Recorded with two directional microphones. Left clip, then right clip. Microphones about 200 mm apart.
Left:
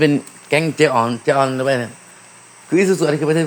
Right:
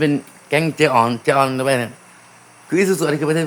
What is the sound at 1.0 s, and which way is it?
A man's voice, 5° right (ahead or behind).